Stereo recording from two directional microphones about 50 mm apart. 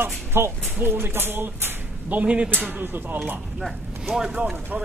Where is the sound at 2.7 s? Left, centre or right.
Right.